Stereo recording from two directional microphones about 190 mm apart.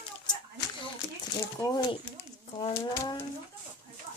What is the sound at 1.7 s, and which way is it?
Speech, 20° left (ahead or behind).